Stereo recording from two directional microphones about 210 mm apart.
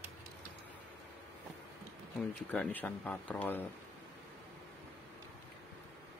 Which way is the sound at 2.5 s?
5° left (ahead or behind).